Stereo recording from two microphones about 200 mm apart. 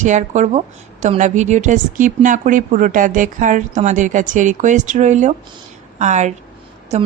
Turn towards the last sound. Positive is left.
turn(degrees=-35)  # may be behind; listen again after turning